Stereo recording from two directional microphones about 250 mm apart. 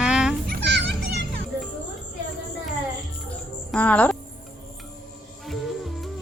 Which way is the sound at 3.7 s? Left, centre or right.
Centre.